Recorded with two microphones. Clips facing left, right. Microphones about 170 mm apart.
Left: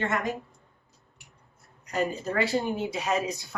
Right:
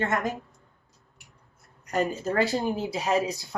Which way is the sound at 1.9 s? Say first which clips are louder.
Right 2 dB; 35° right (ahead or behind).